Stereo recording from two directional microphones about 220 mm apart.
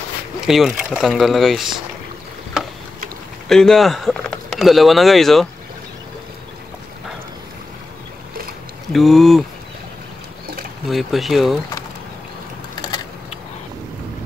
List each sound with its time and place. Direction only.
0.5 s speech: centre (ahead or behind)
3.4 s speech: centre (ahead or behind)
8.9 s speech: centre (ahead or behind)
10.9 s speech: centre (ahead or behind)
12.8 s a sound: 20° left (ahead or behind)